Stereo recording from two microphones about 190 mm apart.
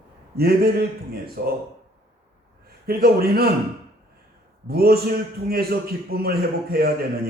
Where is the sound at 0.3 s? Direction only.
55° right (ahead or behind).